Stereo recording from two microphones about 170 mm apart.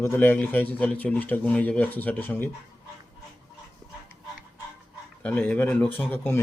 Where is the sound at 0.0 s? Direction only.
15° left (ahead or behind).